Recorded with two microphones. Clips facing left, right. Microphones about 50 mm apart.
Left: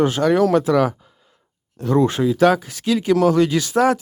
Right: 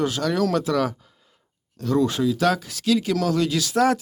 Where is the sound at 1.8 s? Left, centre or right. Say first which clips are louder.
Left 4 dB; left.